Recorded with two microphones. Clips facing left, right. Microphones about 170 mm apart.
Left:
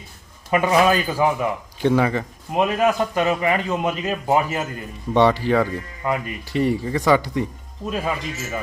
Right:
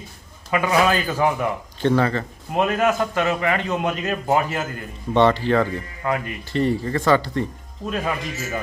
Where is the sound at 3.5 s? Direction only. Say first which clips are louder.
Left 1 dB; 5° left (ahead or behind).